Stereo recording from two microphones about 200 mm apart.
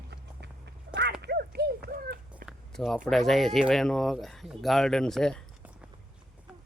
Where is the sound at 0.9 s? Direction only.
60° right (ahead or behind).